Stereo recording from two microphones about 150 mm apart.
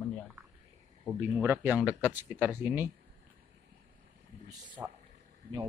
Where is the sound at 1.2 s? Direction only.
10° right (ahead or behind).